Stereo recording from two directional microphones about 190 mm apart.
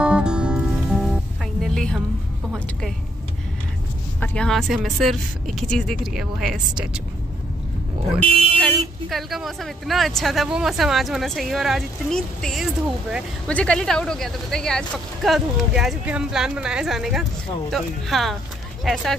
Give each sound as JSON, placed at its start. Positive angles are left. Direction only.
{"t": 0.0, "sound": "music", "side_deg": -5}
{"t": 4.2, "sound": "speech", "side_deg": 5}
{"t": 8.3, "sound": "speech", "side_deg": -30}
{"t": 8.5, "sound": "speech", "side_deg": 0}